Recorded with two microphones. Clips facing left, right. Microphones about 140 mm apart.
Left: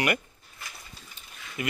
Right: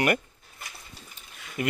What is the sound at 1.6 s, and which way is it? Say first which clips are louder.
Speech: right 3 dB; 45° right (ahead or behind).